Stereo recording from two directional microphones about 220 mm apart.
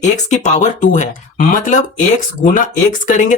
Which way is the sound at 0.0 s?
30° left (ahead or behind).